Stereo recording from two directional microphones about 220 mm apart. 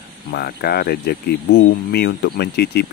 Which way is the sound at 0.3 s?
45° left (ahead or behind).